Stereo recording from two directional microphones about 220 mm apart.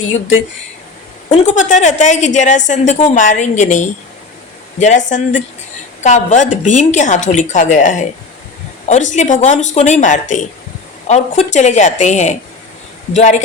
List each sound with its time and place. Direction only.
1.3 s a woman's voice: 35° left (ahead or behind)